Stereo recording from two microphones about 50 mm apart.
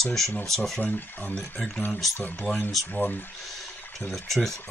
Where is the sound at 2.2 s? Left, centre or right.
Left.